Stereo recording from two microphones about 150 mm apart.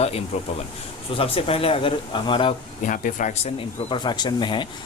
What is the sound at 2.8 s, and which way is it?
Speech, 60° left (ahead or behind).